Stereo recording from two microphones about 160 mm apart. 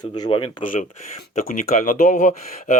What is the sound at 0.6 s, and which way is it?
Speech, 55° left (ahead or behind).